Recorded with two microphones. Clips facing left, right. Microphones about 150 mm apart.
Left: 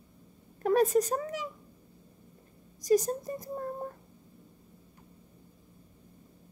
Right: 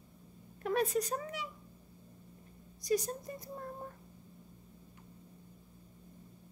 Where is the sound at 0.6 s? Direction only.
40° left (ahead or behind).